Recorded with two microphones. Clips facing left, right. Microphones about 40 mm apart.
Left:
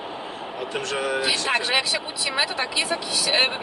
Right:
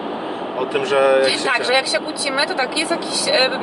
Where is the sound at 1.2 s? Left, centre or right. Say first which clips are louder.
Right 6 dB; centre.